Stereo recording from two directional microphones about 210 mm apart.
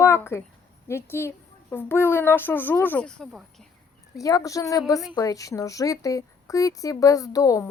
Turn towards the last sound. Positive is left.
turn(degrees=15)  # may be behind; listen again after turning